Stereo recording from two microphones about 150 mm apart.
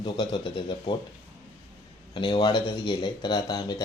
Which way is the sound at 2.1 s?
30° left (ahead or behind).